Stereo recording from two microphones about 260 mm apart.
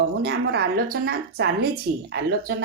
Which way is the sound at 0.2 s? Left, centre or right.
Right.